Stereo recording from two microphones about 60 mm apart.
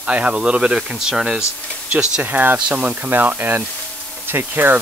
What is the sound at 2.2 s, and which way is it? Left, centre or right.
Speech, right.